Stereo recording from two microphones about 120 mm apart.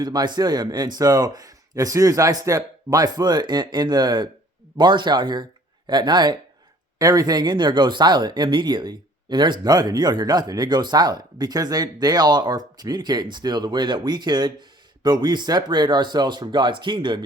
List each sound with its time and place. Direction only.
0.0 s speech: 35° right (ahead or behind)